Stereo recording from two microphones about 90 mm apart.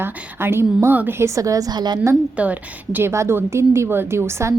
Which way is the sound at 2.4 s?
20° right (ahead or behind).